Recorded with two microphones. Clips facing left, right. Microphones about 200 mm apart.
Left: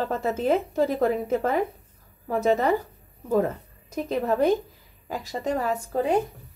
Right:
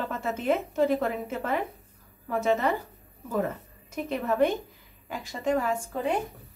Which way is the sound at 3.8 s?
35° left (ahead or behind).